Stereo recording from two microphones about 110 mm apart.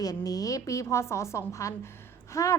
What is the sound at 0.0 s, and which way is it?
A woman's voice, 35° left (ahead or behind).